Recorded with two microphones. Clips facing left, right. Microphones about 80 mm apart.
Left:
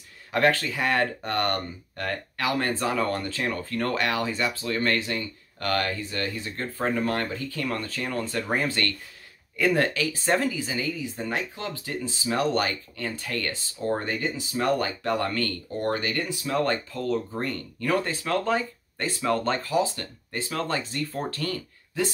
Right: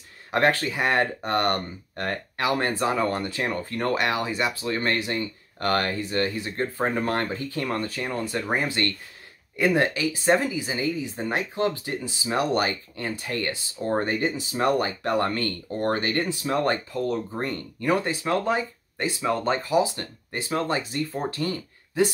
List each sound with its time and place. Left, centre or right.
0.3 s speech: right
10.7 s speech: right
21.1 s speech: centre
21.4 s speech: right